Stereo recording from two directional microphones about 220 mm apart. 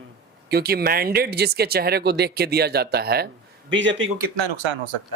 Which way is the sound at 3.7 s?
55° right (ahead or behind).